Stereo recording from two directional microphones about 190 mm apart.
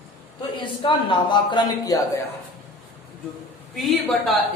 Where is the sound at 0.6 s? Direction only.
25° left (ahead or behind).